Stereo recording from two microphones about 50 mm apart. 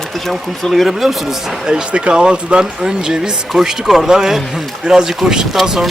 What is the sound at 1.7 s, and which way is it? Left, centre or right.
Speech, centre.